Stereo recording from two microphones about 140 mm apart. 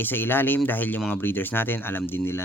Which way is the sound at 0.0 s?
15° left (ahead or behind).